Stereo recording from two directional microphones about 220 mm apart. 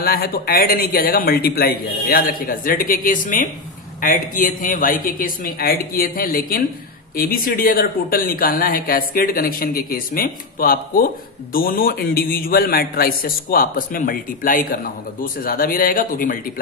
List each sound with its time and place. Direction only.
0.0 s a man's voice: 45° left (ahead or behind)